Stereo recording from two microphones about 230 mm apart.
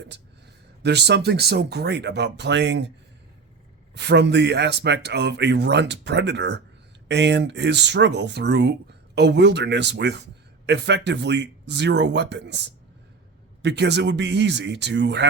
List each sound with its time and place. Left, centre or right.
0.8 s speech: right
3.9 s speech: right